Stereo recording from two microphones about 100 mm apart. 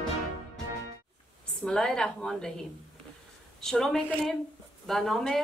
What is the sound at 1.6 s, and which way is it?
Speech, 5° left (ahead or behind).